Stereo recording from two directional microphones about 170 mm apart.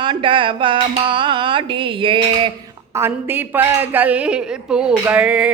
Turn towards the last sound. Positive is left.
turn(degrees=-5)  # may be behind; listen again after turning